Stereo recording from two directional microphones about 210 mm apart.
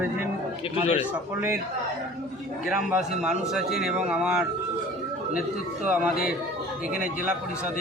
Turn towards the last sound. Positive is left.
turn(degrees=-5)  # may be behind; listen again after turning